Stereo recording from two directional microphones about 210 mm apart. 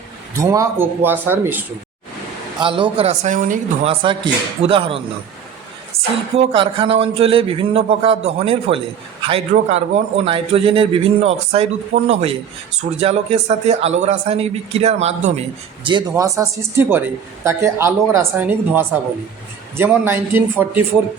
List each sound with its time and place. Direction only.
0.3 s speech: 15° right (ahead or behind)
2.6 s a man's voice: 25° right (ahead or behind); by 3.6 s 40° right (ahead or behind)
3.8 s a man's voice: 25° right (ahead or behind)
6.3 s a man's voice: 25° right (ahead or behind)